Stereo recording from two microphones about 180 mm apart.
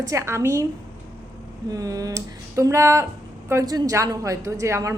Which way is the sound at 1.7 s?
20° right (ahead or behind).